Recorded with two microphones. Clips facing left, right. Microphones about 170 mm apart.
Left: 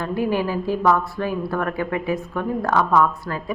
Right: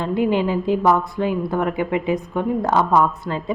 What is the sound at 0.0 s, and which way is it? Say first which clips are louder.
A woman's voice: right 3 dB; 20° right (ahead or behind).